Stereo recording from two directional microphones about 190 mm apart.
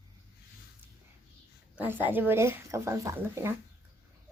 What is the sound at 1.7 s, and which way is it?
A child's voice, 10° right (ahead or behind).